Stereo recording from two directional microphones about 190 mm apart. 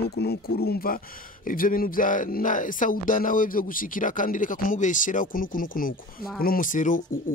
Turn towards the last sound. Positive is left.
turn(degrees=45)  # may be behind; listen again after turning